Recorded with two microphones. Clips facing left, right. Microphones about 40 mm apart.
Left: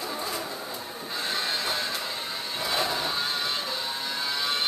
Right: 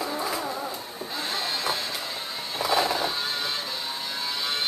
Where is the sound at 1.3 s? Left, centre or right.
Centre.